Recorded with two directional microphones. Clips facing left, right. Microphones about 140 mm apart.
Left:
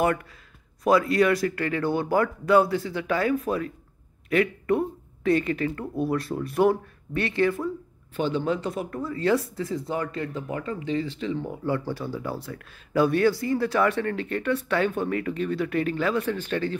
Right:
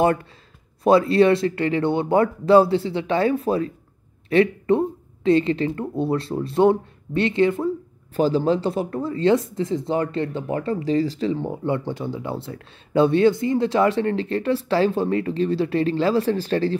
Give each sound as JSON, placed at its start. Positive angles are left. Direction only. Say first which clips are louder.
{"t": 0.0, "sound": "speech", "louder": "right 5 dB", "side_deg": -25}
{"t": 8.2, "sound": "speech", "louder": "right 6 dB", "side_deg": -35}